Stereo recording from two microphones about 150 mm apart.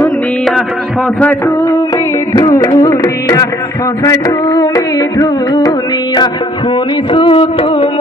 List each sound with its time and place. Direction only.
0.0 s music: centre (ahead or behind)
2.3 s music: 25° left (ahead or behind)